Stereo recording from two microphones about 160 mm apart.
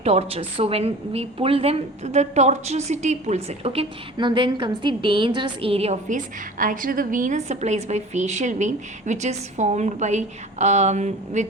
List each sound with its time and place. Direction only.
0.0 s a woman's voice: 40° right (ahead or behind)